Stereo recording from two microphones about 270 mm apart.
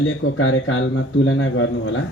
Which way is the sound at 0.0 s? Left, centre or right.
Left.